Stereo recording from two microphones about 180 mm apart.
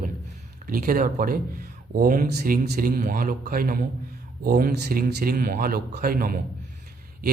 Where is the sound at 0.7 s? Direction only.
50° right (ahead or behind).